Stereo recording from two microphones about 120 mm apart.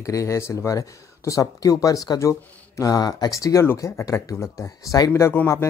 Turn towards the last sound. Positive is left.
turn(degrees=20)  # may be behind; listen again after turning